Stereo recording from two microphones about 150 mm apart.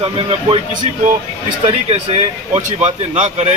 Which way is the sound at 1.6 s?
45° right (ahead or behind).